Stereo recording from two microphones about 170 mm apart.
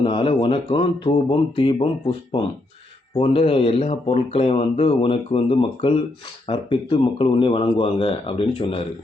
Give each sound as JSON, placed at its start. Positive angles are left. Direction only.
{"t": 0.0, "sound": "speech", "side_deg": 30}